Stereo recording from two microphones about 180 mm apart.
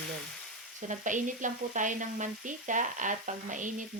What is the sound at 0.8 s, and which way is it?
Sizzle, 45° right (ahead or behind).